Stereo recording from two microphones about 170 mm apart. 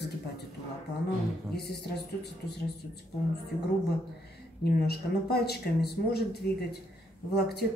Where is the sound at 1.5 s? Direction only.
75° left (ahead or behind).